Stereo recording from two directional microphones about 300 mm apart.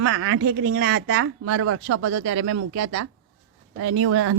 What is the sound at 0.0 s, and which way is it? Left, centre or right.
Speech, right.